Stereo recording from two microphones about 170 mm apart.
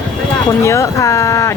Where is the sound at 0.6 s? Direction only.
15° left (ahead or behind).